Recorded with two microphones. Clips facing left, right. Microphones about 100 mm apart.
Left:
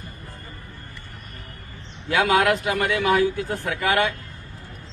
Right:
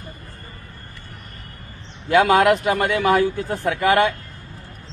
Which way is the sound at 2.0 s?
35° right (ahead or behind).